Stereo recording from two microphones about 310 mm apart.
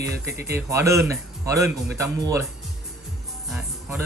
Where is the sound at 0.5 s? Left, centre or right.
Centre.